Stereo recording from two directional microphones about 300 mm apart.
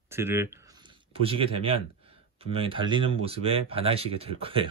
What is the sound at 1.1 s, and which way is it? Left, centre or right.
Speech, centre.